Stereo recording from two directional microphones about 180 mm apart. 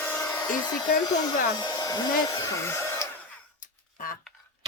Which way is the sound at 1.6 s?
20° left (ahead or behind).